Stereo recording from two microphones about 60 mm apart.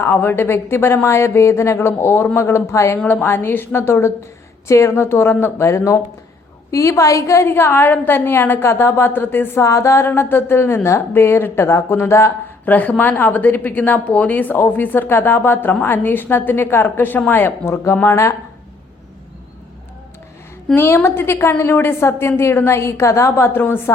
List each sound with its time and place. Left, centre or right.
0.0 s a woman's voice: left
3.1 s a woman's voice: left
5.6 s a woman's voice: left
7.4 s a woman's voice: left
9.6 s speech: left
10.1 s a woman's voice: left
12.6 s a woman's voice: left
18.0 s speech: left
20.7 s a woman's voice: left